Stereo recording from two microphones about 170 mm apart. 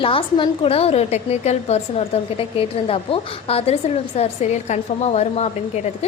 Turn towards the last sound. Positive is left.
turn(degrees=40)  # may be behind; listen again after turning